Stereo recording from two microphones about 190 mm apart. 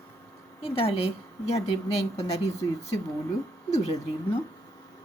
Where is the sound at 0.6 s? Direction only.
30° left (ahead or behind).